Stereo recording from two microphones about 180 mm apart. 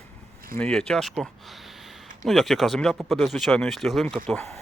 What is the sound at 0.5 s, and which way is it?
Speech, 5° left (ahead or behind).